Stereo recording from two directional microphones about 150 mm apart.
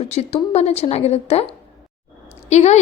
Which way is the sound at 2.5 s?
50° left (ahead or behind).